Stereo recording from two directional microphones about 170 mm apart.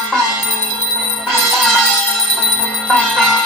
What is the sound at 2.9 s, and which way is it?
Music, centre (ahead or behind).